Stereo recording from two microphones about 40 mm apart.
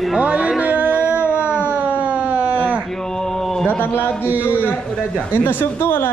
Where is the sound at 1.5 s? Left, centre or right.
Left.